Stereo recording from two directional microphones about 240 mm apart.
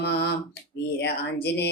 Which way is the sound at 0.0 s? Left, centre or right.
Left.